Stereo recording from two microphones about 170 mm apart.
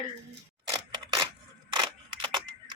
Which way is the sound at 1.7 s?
25° right (ahead or behind).